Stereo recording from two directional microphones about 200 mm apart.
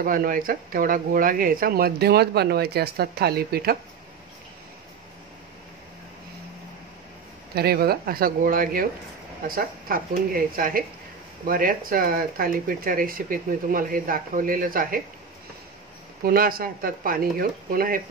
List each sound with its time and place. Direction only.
0.0 s speech: 45° right (ahead or behind)
7.5 s speech: 50° right (ahead or behind)
16.3 s speech: 45° right (ahead or behind)